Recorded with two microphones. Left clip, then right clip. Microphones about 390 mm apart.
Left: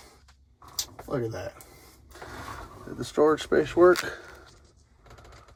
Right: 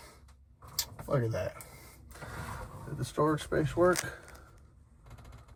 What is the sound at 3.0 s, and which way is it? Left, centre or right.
Speech, left.